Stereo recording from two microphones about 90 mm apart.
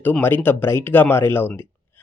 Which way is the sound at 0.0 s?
20° left (ahead or behind).